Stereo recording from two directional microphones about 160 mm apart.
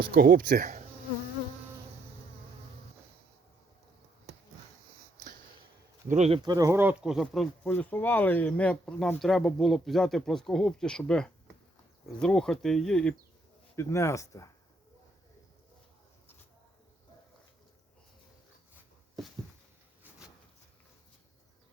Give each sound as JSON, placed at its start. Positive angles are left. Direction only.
{"t": 0.1, "sound": "speech", "side_deg": -65}
{"t": 6.1, "sound": "speech", "side_deg": -45}
{"t": 6.4, "sound": "speech", "side_deg": -25}
{"t": 7.6, "sound": "speech", "side_deg": 10}
{"t": 13.7, "sound": "speech", "side_deg": 20}